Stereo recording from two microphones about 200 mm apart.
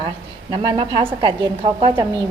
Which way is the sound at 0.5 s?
20° right (ahead or behind).